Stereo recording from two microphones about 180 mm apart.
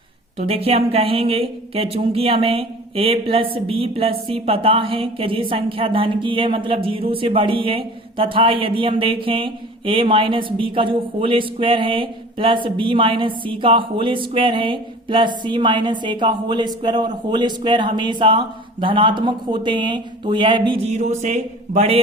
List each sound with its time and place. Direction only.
0.3 s speech: 35° right (ahead or behind)
20.9 s speech: 40° right (ahead or behind)